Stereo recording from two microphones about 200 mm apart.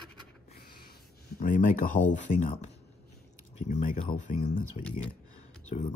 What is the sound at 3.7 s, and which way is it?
Speech, 40° left (ahead or behind).